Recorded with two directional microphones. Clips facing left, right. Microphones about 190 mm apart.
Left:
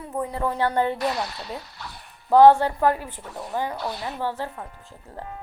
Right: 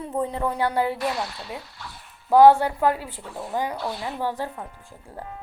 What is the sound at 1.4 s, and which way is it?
Speech, 40° left (ahead or behind).